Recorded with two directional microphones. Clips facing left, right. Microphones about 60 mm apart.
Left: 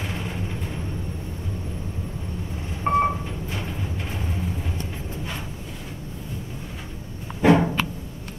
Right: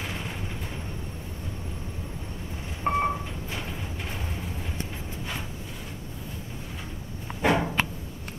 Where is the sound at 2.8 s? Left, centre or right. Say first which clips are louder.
Left 5 dB; centre.